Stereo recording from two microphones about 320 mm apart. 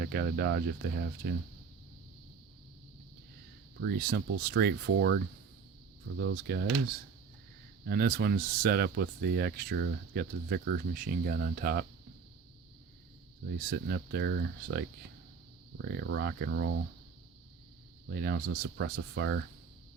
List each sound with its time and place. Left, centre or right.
0.0 s speech: right
3.8 s speech: right
6.1 s speech: right
7.9 s speech: right
13.7 s speech: right
18.1 s speech: right